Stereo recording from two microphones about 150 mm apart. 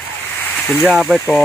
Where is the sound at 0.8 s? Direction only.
5° right (ahead or behind).